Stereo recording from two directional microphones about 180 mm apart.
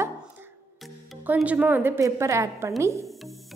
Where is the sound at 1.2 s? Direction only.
10° right (ahead or behind).